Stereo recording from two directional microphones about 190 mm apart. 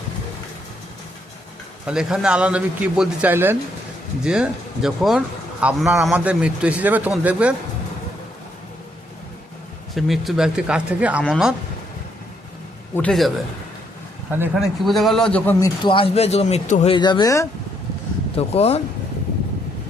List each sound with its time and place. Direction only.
1.9 s a man's voice: 5° right (ahead or behind)
9.9 s speech: centre (ahead or behind)
12.9 s speech: 5° left (ahead or behind)
14.3 s speech: 10° right (ahead or behind)
14.5 s speech: centre (ahead or behind)
15.8 s a man's voice: 25° left (ahead or behind)
16.9 s speech: 25° left (ahead or behind)
18.3 s a man's voice: 35° left (ahead or behind)